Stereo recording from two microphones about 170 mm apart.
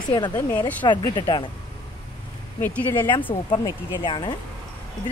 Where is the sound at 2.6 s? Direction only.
10° left (ahead or behind).